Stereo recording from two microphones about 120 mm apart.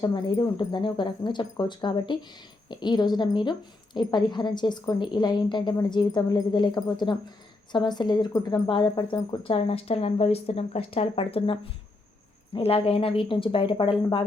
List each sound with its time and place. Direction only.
0.0 s speech: 35° left (ahead or behind)